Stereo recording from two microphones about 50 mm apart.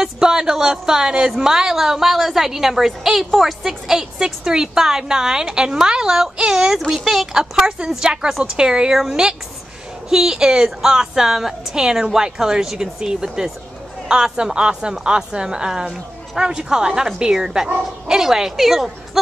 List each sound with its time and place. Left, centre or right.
0.0 s a woman's voice: centre